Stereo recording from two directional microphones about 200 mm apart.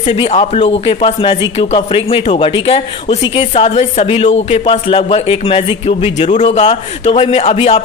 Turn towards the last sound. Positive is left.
turn(degrees=30)  # may be behind; listen again after turning